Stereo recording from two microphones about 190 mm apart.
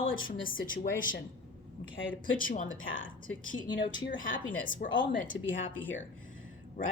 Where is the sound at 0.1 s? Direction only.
45° left (ahead or behind).